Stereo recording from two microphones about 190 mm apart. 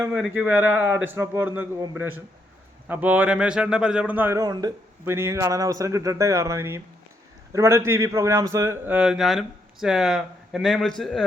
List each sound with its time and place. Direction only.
0.0 s a man's voice: 10° right (ahead or behind)